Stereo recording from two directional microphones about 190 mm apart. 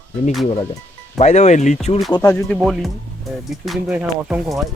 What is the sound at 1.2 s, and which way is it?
Speech, 35° left (ahead or behind).